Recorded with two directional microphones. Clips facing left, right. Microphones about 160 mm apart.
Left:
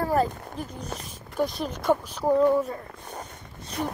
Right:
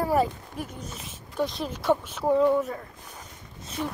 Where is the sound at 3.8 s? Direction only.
50° left (ahead or behind).